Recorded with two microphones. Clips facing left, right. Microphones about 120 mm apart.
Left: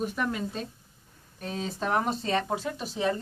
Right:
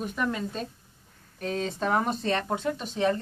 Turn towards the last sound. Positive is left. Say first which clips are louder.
# right 2 dB
turn(degrees=10)  # may be behind; listen again after turning